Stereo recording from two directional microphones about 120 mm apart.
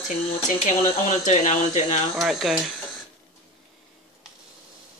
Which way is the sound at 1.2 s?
90° left.